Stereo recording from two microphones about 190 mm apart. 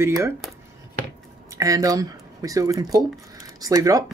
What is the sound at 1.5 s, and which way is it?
Speech, 20° right (ahead or behind).